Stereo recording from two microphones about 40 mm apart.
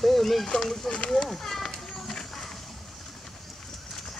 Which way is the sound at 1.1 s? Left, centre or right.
Centre.